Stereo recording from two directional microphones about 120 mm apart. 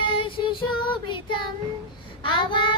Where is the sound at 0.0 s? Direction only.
45° left (ahead or behind).